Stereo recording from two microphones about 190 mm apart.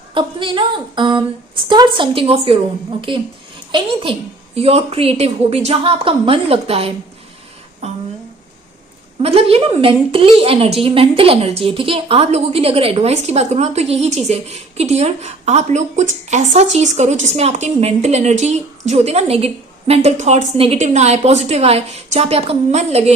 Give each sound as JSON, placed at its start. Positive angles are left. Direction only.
{"t": 0.1, "sound": "a woman's voice", "side_deg": -25}
{"t": 9.2, "sound": "a woman's voice", "side_deg": -30}